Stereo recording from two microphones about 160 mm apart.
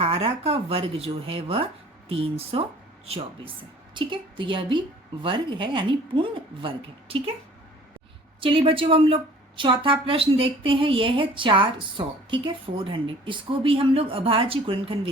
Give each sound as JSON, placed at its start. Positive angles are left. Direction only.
{"t": 0.0, "sound": "a woman's voice", "side_deg": -40}
{"t": 3.1, "sound": "a woman's voice", "side_deg": -35}
{"t": 8.4, "sound": "a woman's voice", "side_deg": -35}